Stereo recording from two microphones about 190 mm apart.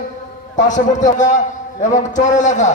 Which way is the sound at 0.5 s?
40° left (ahead or behind).